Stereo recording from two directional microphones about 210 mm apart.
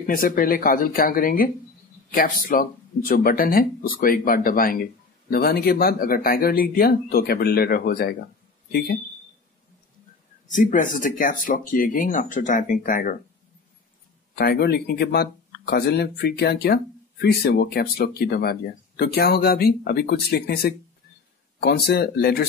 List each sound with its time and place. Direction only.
0.0 s speech: 40° left (ahead or behind)
10.5 s speech: 40° left (ahead or behind)
14.4 s speech: 45° left (ahead or behind)